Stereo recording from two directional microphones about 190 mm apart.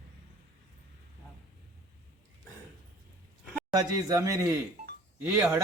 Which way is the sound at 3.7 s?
20° right (ahead or behind).